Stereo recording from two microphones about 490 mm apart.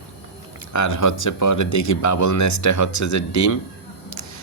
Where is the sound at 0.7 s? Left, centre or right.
Left.